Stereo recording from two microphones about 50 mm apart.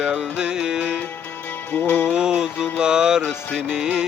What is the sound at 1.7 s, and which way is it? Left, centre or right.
Music, left.